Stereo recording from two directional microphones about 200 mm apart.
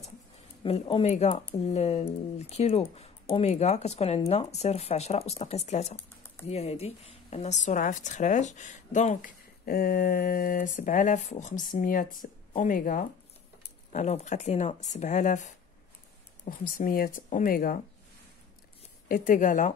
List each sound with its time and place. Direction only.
0.7 s speech: 30° left (ahead or behind)
5.9 s typing: 10° left (ahead or behind)
6.4 s speech: 30° left (ahead or behind)
19.0 s speech: 45° left (ahead or behind)